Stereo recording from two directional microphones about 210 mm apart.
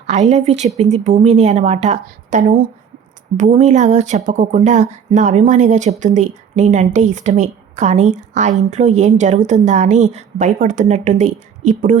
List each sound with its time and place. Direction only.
0.1 s speech: 35° right (ahead or behind)